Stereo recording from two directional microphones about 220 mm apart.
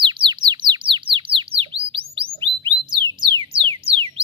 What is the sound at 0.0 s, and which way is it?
Bird, 20° right (ahead or behind).